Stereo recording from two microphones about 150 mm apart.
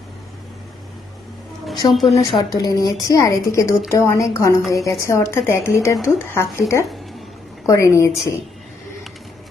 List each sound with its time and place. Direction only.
1.6 s speech: centre (ahead or behind)
2.6 s speech: 20° left (ahead or behind)